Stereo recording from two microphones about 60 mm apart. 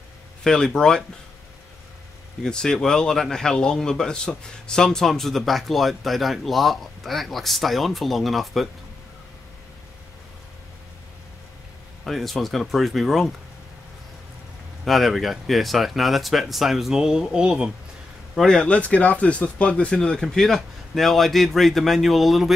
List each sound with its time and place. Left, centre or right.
0.4 s speech: centre
2.4 s a man's voice: centre
12.0 s a man's voice: centre
14.9 s a man's voice: centre
18.5 s a man's voice: centre